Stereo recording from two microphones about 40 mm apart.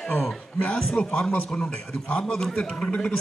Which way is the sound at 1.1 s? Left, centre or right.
Left.